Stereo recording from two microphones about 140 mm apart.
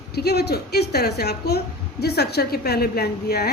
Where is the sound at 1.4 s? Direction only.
90° left.